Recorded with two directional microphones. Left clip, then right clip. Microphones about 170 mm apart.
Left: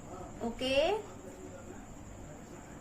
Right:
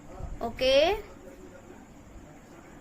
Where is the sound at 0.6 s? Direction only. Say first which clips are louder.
Right 8 dB; 60° right (ahead or behind).